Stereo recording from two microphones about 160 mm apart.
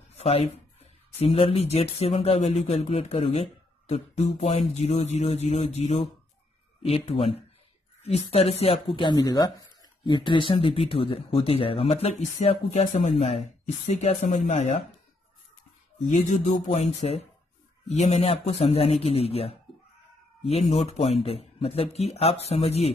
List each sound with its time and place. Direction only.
0.2 s speech: 40° left (ahead or behind)
16.1 s speech: 50° left (ahead or behind)